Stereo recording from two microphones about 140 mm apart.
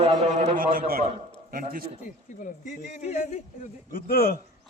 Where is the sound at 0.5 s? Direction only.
90° right.